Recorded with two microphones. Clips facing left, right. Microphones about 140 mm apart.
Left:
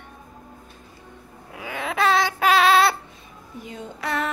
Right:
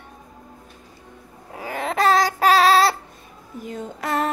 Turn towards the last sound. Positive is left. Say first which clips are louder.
# right 3 dB
turn(degrees=-45)  # may be behind; listen again after turning